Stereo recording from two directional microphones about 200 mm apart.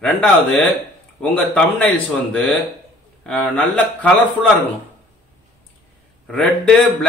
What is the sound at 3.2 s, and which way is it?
Speech, 5° left (ahead or behind).